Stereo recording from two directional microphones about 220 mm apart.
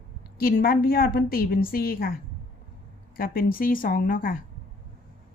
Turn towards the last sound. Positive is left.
turn(degrees=40)  # may be behind; listen again after turning